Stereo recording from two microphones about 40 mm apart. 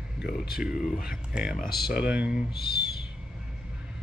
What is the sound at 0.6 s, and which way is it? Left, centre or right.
Speech, centre.